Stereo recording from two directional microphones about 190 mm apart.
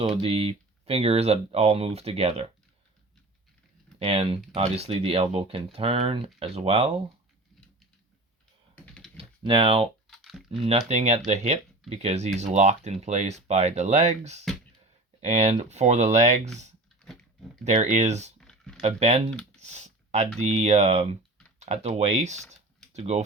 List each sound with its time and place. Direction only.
0.0 s speech: 30° right (ahead or behind)
4.0 s speech: 30° right (ahead or behind)
9.1 s speech: 30° right (ahead or behind)
10.1 s typing: centre (ahead or behind)
10.6 s speech: 35° right (ahead or behind)
17.1 s a sound: 5° left (ahead or behind)
17.7 s speech: 35° right (ahead or behind)
18.3 s a sound: 5° left (ahead or behind)
18.8 s speech: 35° right (ahead or behind)